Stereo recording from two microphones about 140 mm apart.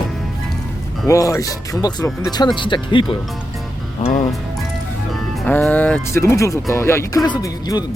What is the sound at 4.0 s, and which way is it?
Speech, 65° left (ahead or behind).